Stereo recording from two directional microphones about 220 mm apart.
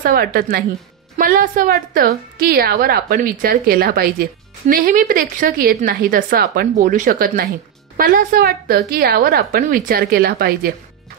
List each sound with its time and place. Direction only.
0.0 s a woman's voice: 45° right (ahead or behind)